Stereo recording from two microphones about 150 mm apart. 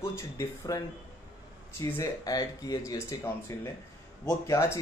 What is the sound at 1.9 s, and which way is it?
Speech, 20° left (ahead or behind).